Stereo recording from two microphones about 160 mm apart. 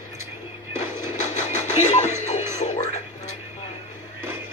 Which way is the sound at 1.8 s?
50° left (ahead or behind).